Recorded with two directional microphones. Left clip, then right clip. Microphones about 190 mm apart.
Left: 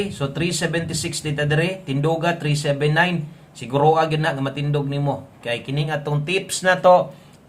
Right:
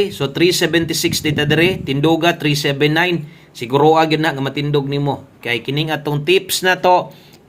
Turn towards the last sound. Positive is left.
turn(degrees=-25)  # may be behind; listen again after turning